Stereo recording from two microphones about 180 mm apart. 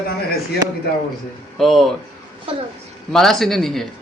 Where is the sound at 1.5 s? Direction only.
Centre (ahead or behind).